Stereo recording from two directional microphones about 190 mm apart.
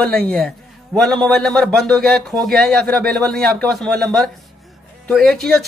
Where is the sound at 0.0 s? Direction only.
5° left (ahead or behind).